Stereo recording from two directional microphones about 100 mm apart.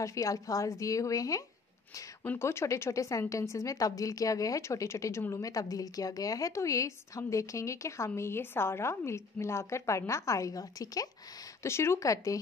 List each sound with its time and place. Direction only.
0.0 s a woman's voice: 35° left (ahead or behind)
11.6 s speech: 25° left (ahead or behind)